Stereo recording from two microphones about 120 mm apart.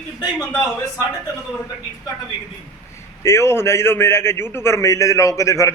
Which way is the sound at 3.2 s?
20° left (ahead or behind).